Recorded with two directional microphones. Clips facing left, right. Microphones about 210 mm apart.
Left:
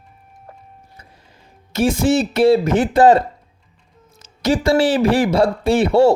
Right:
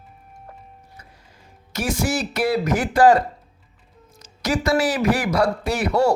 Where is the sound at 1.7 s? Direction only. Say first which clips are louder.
Left 8 dB; 25° left (ahead or behind).